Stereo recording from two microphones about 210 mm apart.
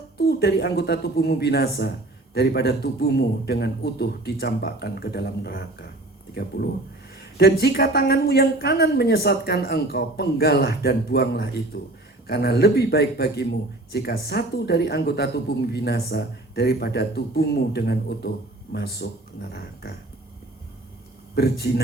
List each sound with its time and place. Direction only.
0.2 s a woman's voice: 50° left (ahead or behind)
7.3 s a woman's voice: 50° left (ahead or behind)
21.3 s a woman's voice: 50° left (ahead or behind)